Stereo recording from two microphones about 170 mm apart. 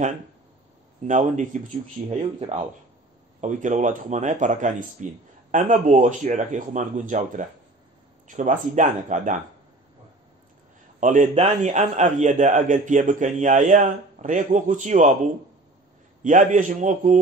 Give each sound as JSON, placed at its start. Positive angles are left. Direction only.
{"t": 1.0, "sound": "a man's voice", "side_deg": -45}
{"t": 11.0, "sound": "a man's voice", "side_deg": -45}
{"t": 16.2, "sound": "a man's voice", "side_deg": -45}